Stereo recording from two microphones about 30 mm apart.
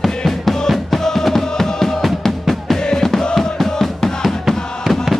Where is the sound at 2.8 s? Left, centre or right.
Left.